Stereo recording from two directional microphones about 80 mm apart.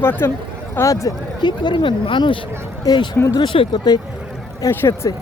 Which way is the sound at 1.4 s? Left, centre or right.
Left.